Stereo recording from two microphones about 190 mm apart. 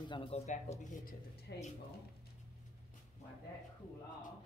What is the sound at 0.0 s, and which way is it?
Speech, 25° left (ahead or behind).